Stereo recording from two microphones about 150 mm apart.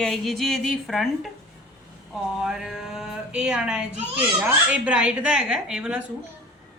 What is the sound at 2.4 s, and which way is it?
Speech, 5° right (ahead or behind).